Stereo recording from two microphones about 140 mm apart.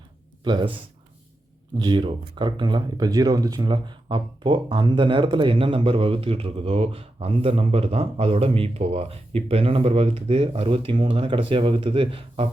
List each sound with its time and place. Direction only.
0.4 s speech: 35° right (ahead or behind)
1.8 s speech: 35° right (ahead or behind)